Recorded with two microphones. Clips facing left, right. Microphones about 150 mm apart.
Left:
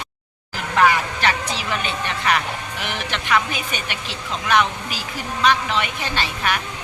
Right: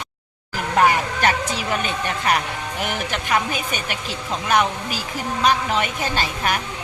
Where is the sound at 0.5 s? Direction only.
45° right (ahead or behind).